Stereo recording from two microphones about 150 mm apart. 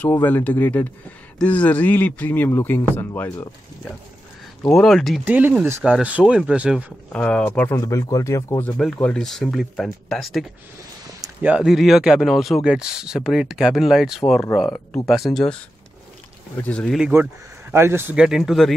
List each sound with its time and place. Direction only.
0.0 s speech: 15° left (ahead or behind)
4.6 s speech: centre (ahead or behind)
5.2 s speech: 10° right (ahead or behind)
7.1 s speech: 10° left (ahead or behind)
7.8 s speech: 20° left (ahead or behind); by 10.4 s 5° left (ahead or behind)
11.4 s speech: 5° right (ahead or behind)
16.6 s speech: 5° left (ahead or behind)
17.0 s speech: 10° right (ahead or behind)